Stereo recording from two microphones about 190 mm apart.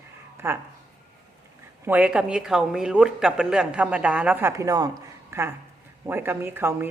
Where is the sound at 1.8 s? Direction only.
5° right (ahead or behind).